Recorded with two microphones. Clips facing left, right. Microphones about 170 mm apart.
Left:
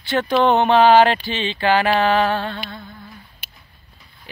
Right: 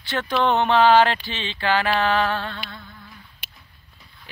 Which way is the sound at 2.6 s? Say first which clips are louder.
Left 5 dB; 35° left (ahead or behind).